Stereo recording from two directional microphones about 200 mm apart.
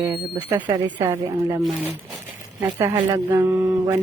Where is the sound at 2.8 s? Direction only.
20° right (ahead or behind).